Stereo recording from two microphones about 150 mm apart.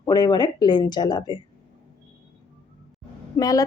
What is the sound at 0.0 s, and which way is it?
A woman's voice, 25° left (ahead or behind).